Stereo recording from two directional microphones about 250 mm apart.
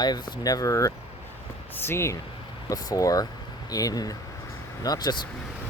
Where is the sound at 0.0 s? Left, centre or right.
Centre.